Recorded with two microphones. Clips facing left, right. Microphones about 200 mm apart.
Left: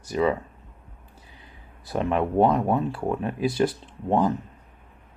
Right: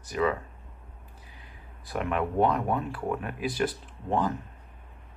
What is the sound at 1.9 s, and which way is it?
Speech, 30° left (ahead or behind).